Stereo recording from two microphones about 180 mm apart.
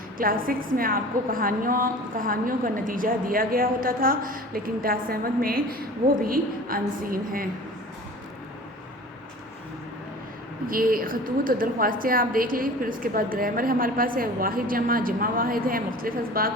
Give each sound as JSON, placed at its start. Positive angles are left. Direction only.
{"t": 0.2, "sound": "a woman's voice", "side_deg": -50}
{"t": 10.7, "sound": "a woman's voice", "side_deg": -50}